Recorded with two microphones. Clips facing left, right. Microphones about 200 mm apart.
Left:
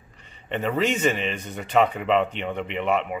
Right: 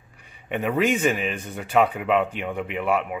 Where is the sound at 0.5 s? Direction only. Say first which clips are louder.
Right 2 dB; 10° right (ahead or behind).